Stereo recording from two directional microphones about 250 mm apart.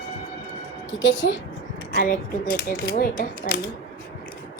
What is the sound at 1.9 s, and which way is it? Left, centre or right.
Speech, left.